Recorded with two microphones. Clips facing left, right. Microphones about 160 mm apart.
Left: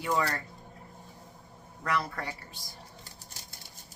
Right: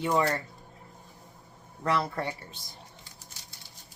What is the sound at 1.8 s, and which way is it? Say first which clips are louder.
Speech: right 4 dB; 30° right (ahead or behind).